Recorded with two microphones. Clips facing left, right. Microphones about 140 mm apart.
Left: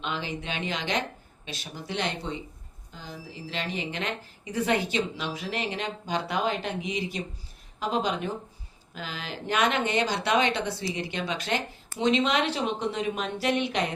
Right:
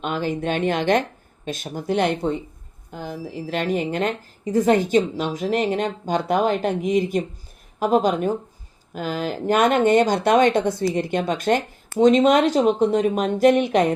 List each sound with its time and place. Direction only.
0.0 s a woman's voice: 45° right (ahead or behind)